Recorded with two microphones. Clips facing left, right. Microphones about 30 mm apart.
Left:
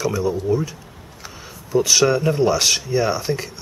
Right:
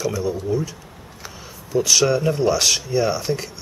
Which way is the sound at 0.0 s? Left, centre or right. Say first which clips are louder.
Left 2 dB; centre.